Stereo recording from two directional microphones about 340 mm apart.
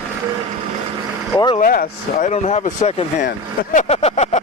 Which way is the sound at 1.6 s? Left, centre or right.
Left.